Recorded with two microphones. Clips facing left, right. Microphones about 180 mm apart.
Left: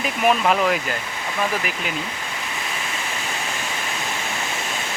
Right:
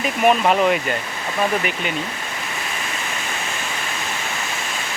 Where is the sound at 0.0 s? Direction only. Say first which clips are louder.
Right 3 dB; centre (ahead or behind).